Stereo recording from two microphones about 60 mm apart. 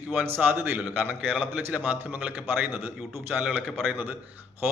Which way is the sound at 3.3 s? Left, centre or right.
Right.